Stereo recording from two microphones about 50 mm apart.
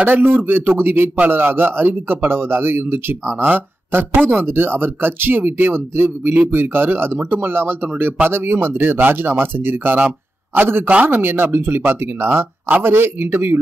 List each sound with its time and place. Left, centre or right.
0.0 s speech: right
9.9 s a sound: right
11.1 s speech: right